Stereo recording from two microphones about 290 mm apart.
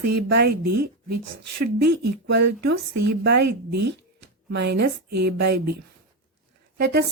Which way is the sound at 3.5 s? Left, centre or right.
Right.